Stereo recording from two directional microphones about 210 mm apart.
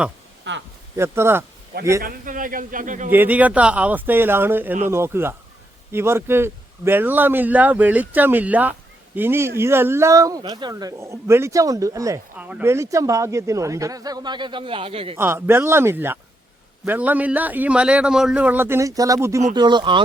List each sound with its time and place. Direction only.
0.5 s a sound: 60° right (ahead or behind)
0.9 s a man's voice: 10° right (ahead or behind)
2.0 s a man's voice: 40° right (ahead or behind)
3.1 s a man's voice: 10° right (ahead or behind); by 15.2 s 25° right (ahead or behind)
15.2 s a man's voice: 10° right (ahead or behind)